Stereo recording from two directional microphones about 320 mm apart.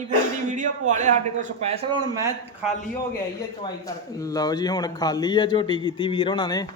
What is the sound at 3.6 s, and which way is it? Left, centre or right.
A man's voice, centre.